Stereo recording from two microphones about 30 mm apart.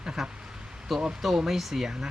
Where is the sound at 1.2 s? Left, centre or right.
Centre.